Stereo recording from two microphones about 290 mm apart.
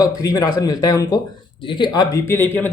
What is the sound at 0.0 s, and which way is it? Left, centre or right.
Speech, centre.